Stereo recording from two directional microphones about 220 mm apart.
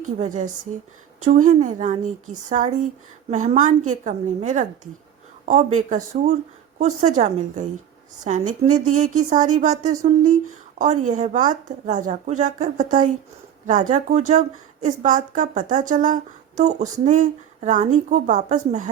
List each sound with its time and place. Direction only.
0.0 s a woman's voice: 35° right (ahead or behind)